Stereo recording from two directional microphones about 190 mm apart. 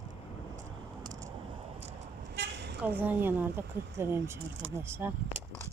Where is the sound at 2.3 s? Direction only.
65° right (ahead or behind).